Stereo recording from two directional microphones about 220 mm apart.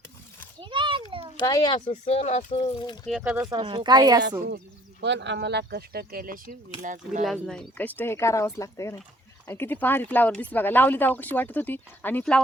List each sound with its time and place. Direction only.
0.6 s a sound: 20° right (ahead or behind)
1.4 s a child's voice: 20° left (ahead or behind)
1.9 s speech: 30° left (ahead or behind)
3.1 s speech: centre (ahead or behind)
3.5 s speech: 20° right (ahead or behind)
4.4 s speech: 50° right (ahead or behind)
7.3 s speech: centre (ahead or behind)